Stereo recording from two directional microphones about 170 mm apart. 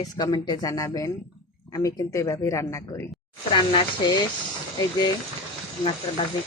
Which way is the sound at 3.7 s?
30° left (ahead or behind).